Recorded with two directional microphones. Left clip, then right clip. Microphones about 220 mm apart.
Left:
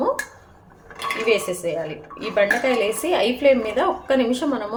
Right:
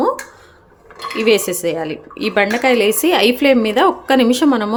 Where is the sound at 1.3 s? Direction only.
45° right (ahead or behind).